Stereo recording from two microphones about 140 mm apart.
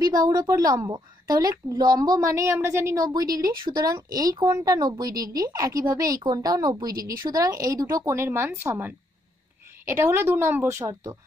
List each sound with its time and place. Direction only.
0.3 s a woman's voice: 25° right (ahead or behind)